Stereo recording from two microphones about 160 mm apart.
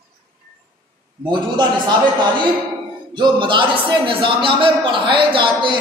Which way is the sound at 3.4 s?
30° right (ahead or behind).